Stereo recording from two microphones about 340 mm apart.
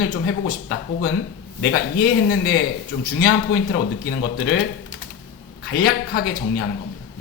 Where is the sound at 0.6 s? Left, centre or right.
Left.